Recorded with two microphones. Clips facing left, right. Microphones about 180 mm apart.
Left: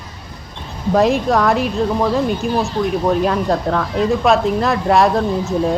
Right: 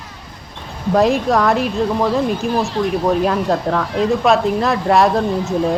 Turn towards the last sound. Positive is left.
turn(degrees=0)  # may be behind; listen again after turning